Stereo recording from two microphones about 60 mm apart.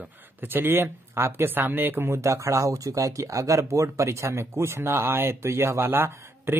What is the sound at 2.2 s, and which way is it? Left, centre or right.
Speech, right.